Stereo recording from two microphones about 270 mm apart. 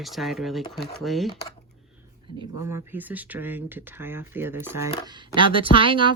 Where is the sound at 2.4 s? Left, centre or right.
Centre.